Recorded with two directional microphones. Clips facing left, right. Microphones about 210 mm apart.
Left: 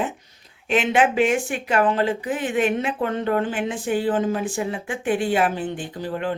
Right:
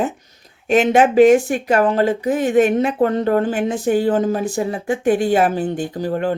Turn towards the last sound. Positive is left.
turn(degrees=-40)  # may be behind; listen again after turning